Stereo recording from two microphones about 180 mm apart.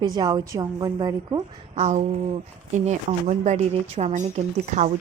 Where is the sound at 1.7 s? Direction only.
40° right (ahead or behind).